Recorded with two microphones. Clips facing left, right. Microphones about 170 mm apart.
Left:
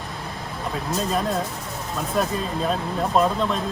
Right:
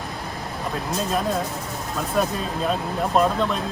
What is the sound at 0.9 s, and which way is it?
Speech, centre (ahead or behind).